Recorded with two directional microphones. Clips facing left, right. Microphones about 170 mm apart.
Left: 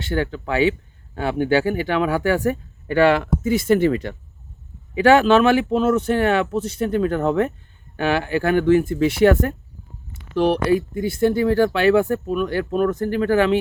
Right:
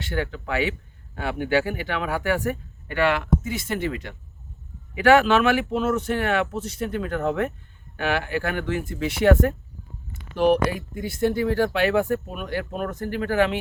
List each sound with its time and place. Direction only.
0.0 s speech: 30° left (ahead or behind)
4.9 s speech: 25° left (ahead or behind)
10.3 s speech: 30° left (ahead or behind)